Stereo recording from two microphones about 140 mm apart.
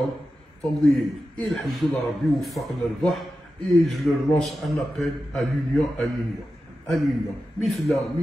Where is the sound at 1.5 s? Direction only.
Centre (ahead or behind).